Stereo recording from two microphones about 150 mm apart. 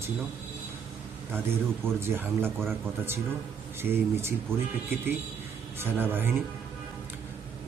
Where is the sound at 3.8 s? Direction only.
15° right (ahead or behind).